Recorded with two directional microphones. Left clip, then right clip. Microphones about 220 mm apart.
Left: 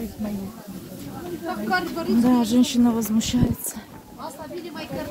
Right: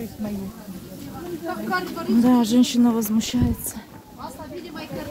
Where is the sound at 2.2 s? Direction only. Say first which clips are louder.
Right 2 dB; 20° right (ahead or behind).